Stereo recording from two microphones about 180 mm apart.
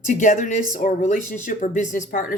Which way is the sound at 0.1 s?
45° left (ahead or behind).